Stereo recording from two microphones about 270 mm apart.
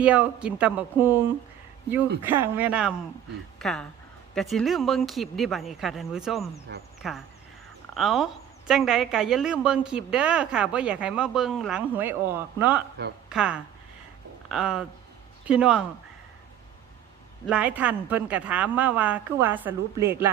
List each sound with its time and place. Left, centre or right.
0.0 s a woman's voice: centre
2.2 s a woman's voice: centre
6.7 s speech: right
7.0 s a woman's voice: centre
17.4 s a woman's voice: centre